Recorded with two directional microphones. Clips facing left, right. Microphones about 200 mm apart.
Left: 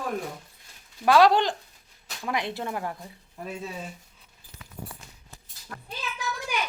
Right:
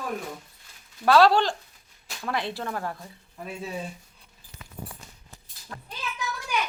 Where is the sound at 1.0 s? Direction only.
15° left (ahead or behind).